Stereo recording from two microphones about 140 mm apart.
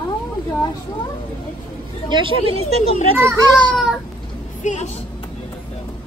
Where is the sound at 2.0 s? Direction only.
35° right (ahead or behind).